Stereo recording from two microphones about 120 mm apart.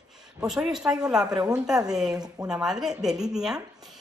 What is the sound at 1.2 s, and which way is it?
Speech, 35° right (ahead or behind).